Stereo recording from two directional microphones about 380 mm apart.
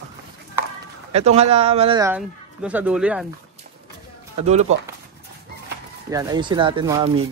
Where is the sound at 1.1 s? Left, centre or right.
Centre.